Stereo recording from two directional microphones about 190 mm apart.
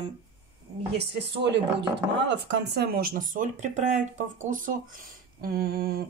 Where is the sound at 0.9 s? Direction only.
65° right (ahead or behind).